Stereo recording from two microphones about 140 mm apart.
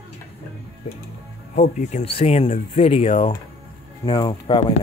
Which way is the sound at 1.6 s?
55° left (ahead or behind).